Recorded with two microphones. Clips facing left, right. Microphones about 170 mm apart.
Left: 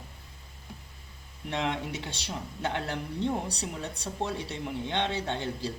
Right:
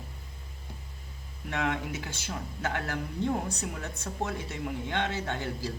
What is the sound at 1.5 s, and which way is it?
A woman's voice, 25° left (ahead or behind).